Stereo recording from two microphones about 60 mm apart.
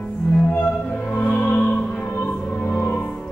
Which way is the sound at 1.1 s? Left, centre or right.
Left.